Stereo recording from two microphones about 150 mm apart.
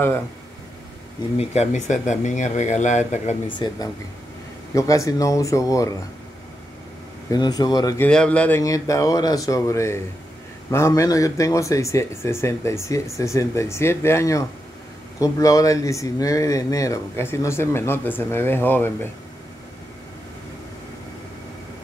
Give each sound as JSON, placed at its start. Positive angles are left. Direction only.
{"t": 1.4, "sound": "speech", "side_deg": 45}
{"t": 3.4, "sound": "speech", "side_deg": 30}
{"t": 7.2, "sound": "speech", "side_deg": 25}
{"t": 8.0, "sound": "speech", "side_deg": 5}